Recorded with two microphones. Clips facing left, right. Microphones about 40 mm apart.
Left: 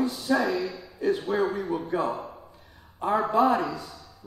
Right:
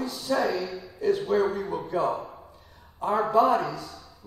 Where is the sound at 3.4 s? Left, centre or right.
Centre.